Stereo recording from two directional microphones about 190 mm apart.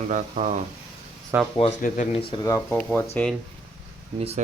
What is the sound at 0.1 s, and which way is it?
Speech, 40° right (ahead or behind).